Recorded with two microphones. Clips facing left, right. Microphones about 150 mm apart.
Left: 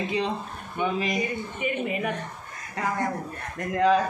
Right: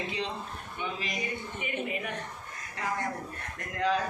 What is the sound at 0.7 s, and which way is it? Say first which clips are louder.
Speech: left 10 dB; 60° left (ahead or behind).